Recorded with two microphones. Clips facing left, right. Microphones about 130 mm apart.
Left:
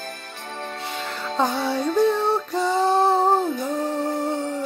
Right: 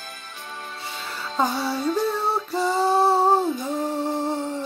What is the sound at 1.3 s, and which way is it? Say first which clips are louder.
Music: left 1 dB; 5° right (ahead or behind).